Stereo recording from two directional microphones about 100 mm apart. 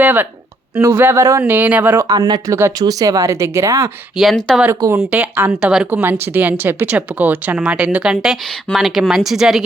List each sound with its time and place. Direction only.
0.0 s a woman's voice: 20° right (ahead or behind)
2.0 s speech: 40° right (ahead or behind)
4.2 s speech: centre (ahead or behind)
4.7 s speech: 25° right (ahead or behind)
4.9 s a woman's voice: 15° right (ahead or behind)